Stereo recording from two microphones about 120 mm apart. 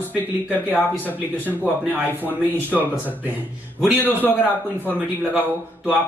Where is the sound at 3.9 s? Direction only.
15° left (ahead or behind).